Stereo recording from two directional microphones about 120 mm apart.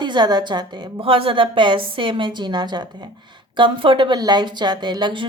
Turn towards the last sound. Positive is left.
turn(degrees=-40)  # may be behind; listen again after turning